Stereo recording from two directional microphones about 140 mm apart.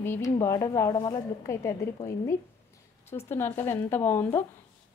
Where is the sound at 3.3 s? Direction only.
15° left (ahead or behind).